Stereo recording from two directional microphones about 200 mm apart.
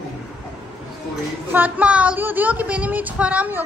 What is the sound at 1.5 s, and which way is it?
Speech, 5° right (ahead or behind).